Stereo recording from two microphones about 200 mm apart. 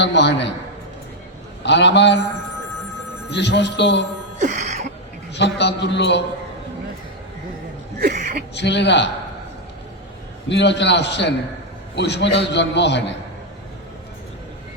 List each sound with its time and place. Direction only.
0.0 s a man's voice: 60° left (ahead or behind)
1.6 s a man's voice: 60° left (ahead or behind)
3.3 s a man's voice: 60° left (ahead or behind)
4.4 s music: 35° right (ahead or behind)
5.3 s a man's voice: 60° left (ahead or behind)
8.0 s a sound: 40° right (ahead or behind)
8.5 s a man's voice: 60° left (ahead or behind)
10.5 s a man's voice: 60° left (ahead or behind)